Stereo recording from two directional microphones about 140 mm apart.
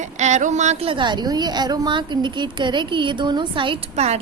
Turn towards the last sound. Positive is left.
turn(degrees=-50)  # may be behind; listen again after turning